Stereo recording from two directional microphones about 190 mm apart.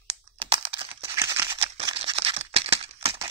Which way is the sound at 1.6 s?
30° right (ahead or behind).